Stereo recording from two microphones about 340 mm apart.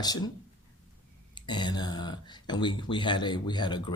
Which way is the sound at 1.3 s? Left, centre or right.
Centre.